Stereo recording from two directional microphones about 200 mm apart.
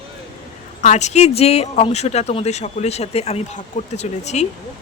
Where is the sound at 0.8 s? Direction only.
35° left (ahead or behind).